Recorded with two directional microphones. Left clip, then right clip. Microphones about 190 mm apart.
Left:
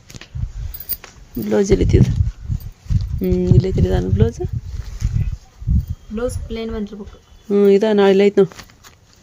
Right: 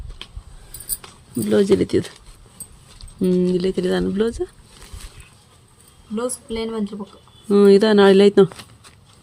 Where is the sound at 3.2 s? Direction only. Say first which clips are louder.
Even; 5° right (ahead or behind).